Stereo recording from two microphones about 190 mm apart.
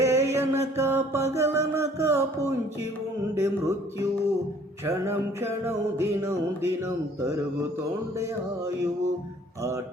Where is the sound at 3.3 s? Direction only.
15° right (ahead or behind).